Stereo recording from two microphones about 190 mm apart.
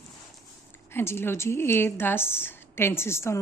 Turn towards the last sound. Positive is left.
turn(degrees=15)  # may be behind; listen again after turning